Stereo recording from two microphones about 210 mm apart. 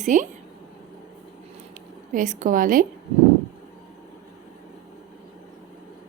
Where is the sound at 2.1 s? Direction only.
35° right (ahead or behind).